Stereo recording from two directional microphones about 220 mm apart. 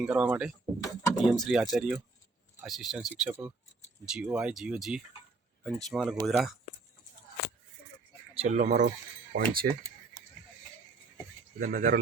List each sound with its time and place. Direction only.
0.0 s speech: 5° right (ahead or behind)
8.4 s speech: 30° right (ahead or behind)
11.6 s speech: 40° right (ahead or behind)